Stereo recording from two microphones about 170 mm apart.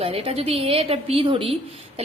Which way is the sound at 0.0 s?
35° right (ahead or behind).